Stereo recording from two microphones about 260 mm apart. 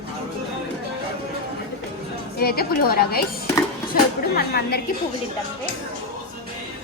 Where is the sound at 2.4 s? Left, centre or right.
Left.